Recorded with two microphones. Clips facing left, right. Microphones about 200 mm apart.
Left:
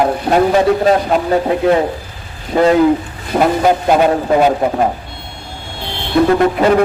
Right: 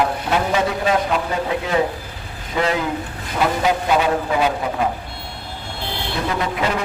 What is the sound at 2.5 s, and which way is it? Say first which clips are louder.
A man's voice: left 11 dB; 45° left (ahead or behind).